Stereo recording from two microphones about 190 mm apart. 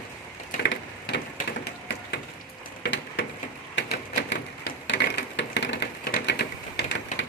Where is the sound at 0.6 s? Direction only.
60° left (ahead or behind).